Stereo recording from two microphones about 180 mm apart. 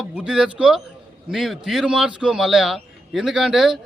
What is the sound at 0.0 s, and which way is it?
A man's voice, 5° right (ahead or behind).